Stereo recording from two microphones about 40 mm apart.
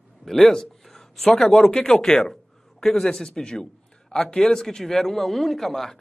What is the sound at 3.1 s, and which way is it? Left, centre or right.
A man's voice, centre.